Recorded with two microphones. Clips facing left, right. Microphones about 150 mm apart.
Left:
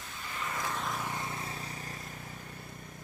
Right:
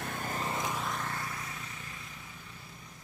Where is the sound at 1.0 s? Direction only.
20° left (ahead or behind); by 2.9 s 50° left (ahead or behind).